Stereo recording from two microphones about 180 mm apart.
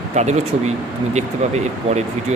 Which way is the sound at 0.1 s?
40° right (ahead or behind).